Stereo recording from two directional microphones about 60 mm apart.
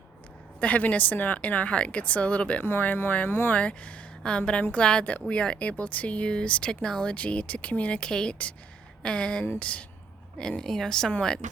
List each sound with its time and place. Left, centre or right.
0.6 s speech: left
2.6 s speech: left
3.5 s a woman's voice: left
10.6 s a woman's voice: centre